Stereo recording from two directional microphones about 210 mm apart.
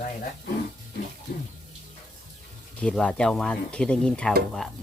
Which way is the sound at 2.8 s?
5° left (ahead or behind).